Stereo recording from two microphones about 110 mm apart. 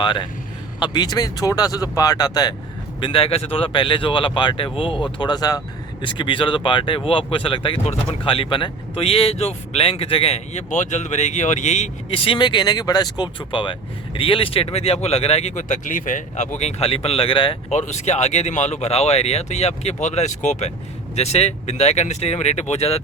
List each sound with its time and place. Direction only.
0.0 s speech: 45° left (ahead or behind)
3.0 s speech: 55° left (ahead or behind)
5.1 s speech: 40° left (ahead or behind); by 11.9 s 90° left
12.1 s speech: 55° left (ahead or behind)
17.7 s speech: 90° left
21.2 s speech: 75° left (ahead or behind)